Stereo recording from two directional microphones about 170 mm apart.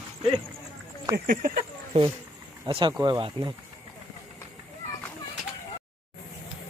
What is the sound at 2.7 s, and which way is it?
Speech, 30° right (ahead or behind).